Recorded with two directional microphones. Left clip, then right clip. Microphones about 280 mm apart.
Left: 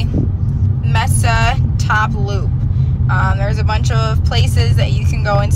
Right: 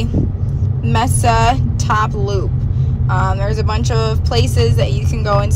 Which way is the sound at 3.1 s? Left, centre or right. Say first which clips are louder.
Even; centre.